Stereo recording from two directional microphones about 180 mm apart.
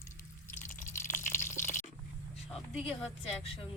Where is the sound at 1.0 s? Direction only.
45° left (ahead or behind).